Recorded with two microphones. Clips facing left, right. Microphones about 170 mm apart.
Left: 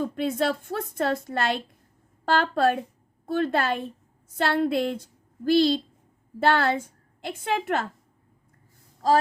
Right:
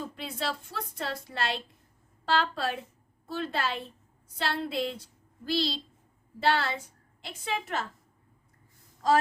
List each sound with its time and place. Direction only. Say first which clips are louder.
0.0 s a woman's voice: left 10 dB; 50° left (ahead or behind)